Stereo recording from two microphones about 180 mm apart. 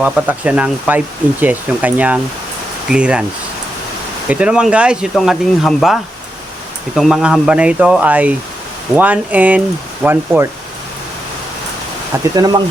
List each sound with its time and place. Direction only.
0.0 s speech: 10° right (ahead or behind)
4.3 s speech: 5° right (ahead or behind)
12.4 s speech: 20° right (ahead or behind)